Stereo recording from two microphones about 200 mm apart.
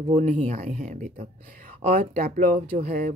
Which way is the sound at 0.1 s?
35° right (ahead or behind).